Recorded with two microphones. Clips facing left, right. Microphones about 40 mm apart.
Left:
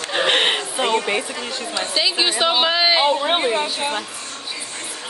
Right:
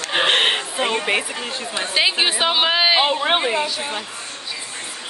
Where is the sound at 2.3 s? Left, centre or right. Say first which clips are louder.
Even; centre.